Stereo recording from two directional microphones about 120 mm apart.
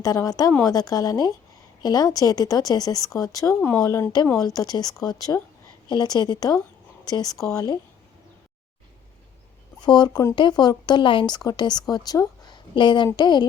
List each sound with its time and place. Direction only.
0.0 s speech: 30° left (ahead or behind)
9.8 s speech: 35° left (ahead or behind)